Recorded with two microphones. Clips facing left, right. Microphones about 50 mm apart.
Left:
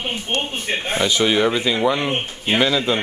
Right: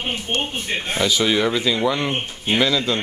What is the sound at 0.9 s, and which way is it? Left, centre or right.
Speech, centre.